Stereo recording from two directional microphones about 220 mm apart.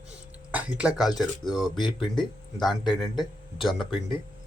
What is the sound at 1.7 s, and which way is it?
Speech, 20° left (ahead or behind).